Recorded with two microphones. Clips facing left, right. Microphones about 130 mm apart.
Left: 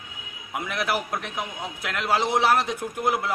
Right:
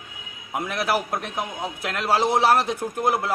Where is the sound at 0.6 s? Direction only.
35° right (ahead or behind).